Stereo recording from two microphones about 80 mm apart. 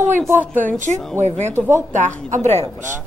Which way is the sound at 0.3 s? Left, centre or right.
Right.